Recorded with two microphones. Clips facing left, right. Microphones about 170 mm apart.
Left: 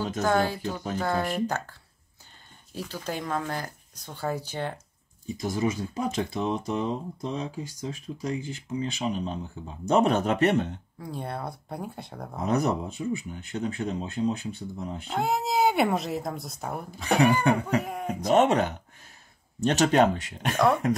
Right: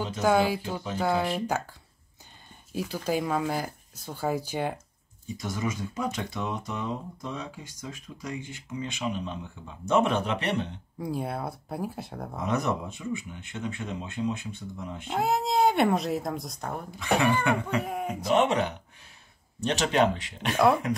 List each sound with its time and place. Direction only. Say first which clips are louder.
0.2 s speech: right 2 dB; 10° right (ahead or behind)
5.4 s speech: left 4 dB; 35° left (ahead or behind)
11.0 s speech: right 4 dB; 10° right (ahead or behind)
12.4 s speech: left 3 dB; 35° left (ahead or behind)
15.0 s speech: right 1 dB; centre (ahead or behind)
17.4 s speech: left 3 dB; 40° left (ahead or behind)
20.5 s speech: right 1 dB; 5° right (ahead or behind)